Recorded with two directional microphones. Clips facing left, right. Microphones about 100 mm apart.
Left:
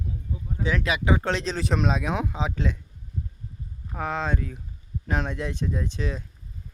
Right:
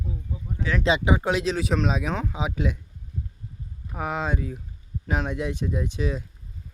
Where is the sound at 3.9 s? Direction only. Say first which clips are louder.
Even; 10° right (ahead or behind).